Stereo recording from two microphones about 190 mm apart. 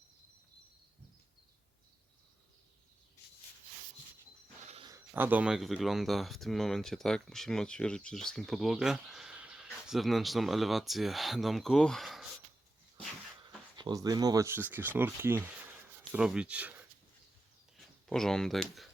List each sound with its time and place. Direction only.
4.6 s a sound: 35° right (ahead or behind)
4.9 s speech: 10° right (ahead or behind)
13.7 s speech: 20° right (ahead or behind)
17.7 s speech: centre (ahead or behind)